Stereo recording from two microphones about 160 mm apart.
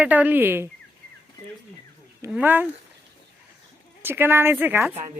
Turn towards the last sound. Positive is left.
turn(degrees=-10)  # may be behind; listen again after turning